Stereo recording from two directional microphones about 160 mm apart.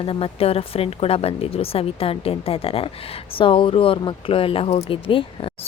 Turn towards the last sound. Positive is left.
turn(degrees=35)  # may be behind; listen again after turning